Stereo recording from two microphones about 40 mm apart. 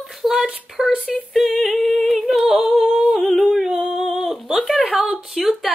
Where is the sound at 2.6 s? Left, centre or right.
Centre.